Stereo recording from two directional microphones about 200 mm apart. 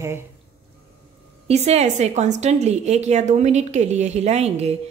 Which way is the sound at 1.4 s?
35° right (ahead or behind).